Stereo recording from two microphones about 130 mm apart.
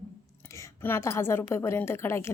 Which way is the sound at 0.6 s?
20° left (ahead or behind).